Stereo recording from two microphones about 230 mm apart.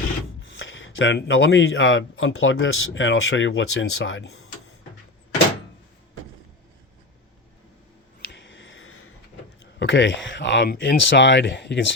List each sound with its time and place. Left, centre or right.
0.5 s speech: left
8.3 s a sound: left
9.7 s speech: left